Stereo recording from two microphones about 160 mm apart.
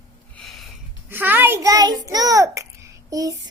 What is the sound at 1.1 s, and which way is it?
A child's voice, 15° right (ahead or behind).